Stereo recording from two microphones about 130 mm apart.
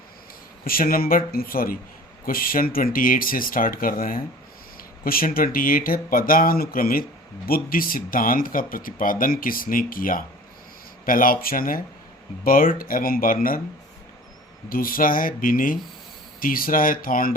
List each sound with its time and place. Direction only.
0.8 s speech: 90° left
14.7 s speech: 90° left